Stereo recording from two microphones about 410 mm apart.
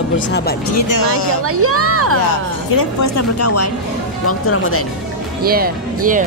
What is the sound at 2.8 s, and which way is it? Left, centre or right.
Speech, left.